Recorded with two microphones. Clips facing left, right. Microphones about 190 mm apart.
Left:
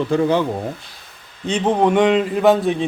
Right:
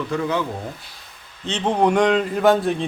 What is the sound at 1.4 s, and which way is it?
Speech, 10° left (ahead or behind).